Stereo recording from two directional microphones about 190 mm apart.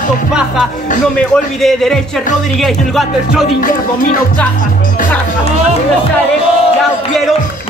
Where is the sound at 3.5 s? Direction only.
45° left (ahead or behind).